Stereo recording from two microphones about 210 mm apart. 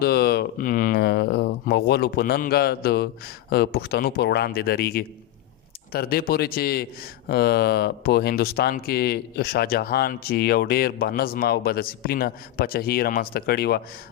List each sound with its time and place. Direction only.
0.0 s speech: 50° left (ahead or behind)